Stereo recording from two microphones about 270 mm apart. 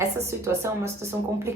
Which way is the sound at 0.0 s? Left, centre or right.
Centre.